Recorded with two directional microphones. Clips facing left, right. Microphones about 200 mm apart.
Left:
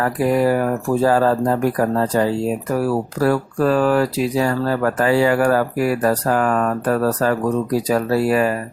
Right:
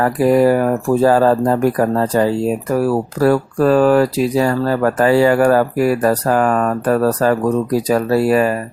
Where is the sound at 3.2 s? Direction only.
40° right (ahead or behind).